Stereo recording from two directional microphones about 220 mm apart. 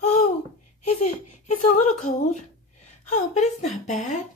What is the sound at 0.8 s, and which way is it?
Speech, 30° left (ahead or behind).